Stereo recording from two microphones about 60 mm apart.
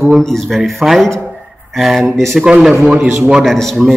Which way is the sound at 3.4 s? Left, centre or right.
Centre.